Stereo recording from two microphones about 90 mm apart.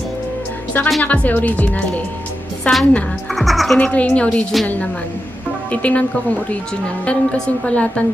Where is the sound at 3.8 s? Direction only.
15° left (ahead or behind).